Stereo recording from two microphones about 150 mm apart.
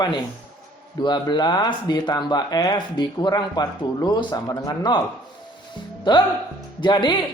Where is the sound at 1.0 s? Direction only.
30° left (ahead or behind).